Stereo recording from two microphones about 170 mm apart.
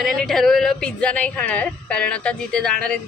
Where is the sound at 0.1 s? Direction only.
Centre (ahead or behind).